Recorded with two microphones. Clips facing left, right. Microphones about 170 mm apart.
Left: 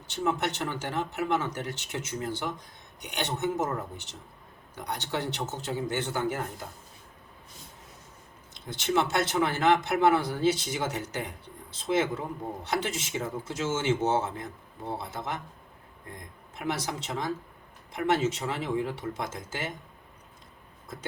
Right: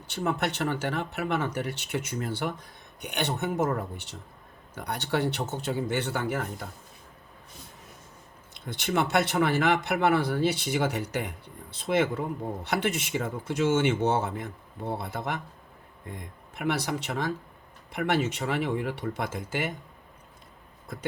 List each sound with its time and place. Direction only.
0.1 s a man's voice: 60° right (ahead or behind)
8.5 s a man's voice: 60° right (ahead or behind)